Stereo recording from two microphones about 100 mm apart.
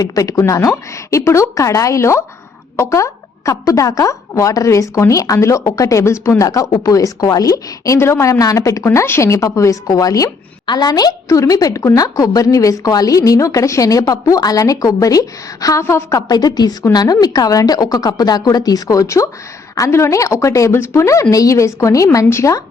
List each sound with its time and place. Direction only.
0.0 s a woman's voice: 35° left (ahead or behind)